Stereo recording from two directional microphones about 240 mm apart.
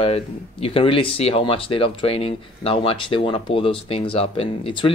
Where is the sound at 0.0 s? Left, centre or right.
Left.